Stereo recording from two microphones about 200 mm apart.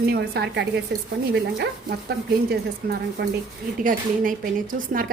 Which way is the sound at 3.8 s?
45° right (ahead or behind).